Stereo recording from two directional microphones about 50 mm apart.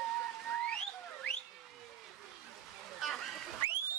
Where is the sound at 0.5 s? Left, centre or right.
Left.